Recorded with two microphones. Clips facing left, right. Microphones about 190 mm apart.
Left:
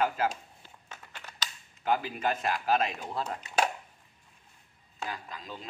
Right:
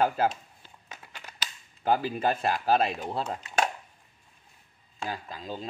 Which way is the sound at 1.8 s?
35° right (ahead or behind).